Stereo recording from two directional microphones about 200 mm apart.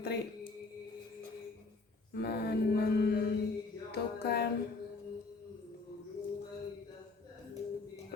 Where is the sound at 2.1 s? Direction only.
55° left (ahead or behind).